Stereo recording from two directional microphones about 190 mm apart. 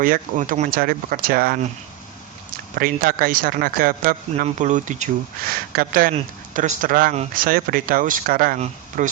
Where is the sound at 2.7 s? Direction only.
50° right (ahead or behind).